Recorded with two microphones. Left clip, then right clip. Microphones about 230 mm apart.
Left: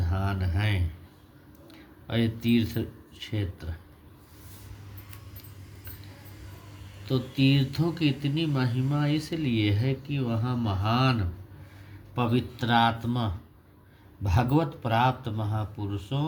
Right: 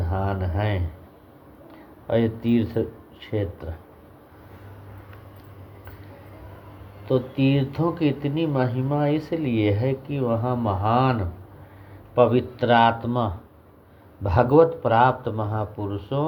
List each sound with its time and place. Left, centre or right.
0.0 s a sound: left
2.0 s speech: left
7.1 s speech: left